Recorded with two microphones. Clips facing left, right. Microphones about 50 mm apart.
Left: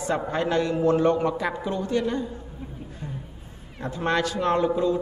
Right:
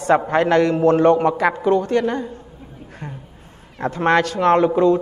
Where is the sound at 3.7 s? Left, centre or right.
Right.